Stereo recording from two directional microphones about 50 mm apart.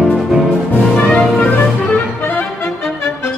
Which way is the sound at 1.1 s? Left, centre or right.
Centre.